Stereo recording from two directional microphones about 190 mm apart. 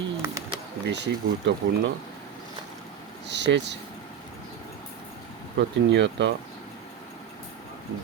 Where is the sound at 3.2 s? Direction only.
65° right (ahead or behind).